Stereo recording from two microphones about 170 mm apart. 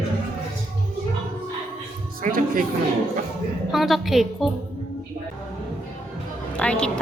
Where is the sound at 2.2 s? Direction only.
55° right (ahead or behind).